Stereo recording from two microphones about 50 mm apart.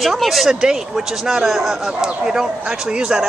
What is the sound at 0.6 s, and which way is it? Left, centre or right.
Speech, centre.